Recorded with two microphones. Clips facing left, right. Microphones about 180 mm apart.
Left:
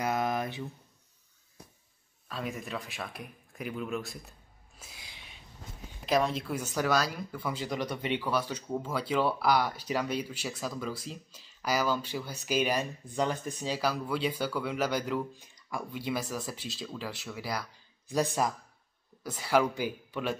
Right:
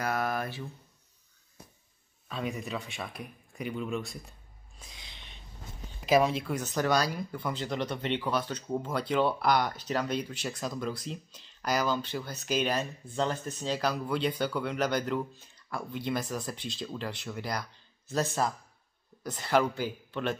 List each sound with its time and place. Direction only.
0.0 s a sound: 20° left (ahead or behind)
2.2 s speech: centre (ahead or behind)
6.0 s speech: 5° right (ahead or behind)